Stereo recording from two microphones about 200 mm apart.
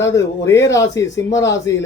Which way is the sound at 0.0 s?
15° left (ahead or behind).